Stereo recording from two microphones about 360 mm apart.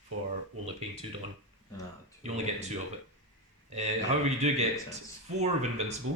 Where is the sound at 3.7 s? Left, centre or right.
Centre.